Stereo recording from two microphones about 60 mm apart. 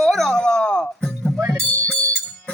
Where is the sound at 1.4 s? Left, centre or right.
Right.